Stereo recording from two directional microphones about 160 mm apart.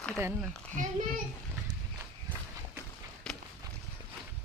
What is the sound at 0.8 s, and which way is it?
Speech, 50° right (ahead or behind).